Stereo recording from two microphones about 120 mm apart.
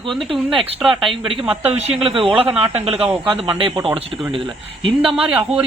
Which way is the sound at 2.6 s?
55° right (ahead or behind).